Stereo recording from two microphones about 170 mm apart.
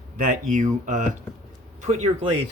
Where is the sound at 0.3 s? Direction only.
50° right (ahead or behind).